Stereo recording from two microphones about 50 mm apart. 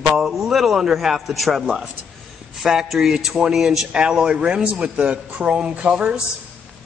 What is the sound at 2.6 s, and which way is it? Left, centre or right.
A man's voice, centre.